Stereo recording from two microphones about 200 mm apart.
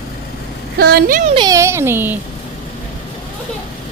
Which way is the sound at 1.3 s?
20° right (ahead or behind).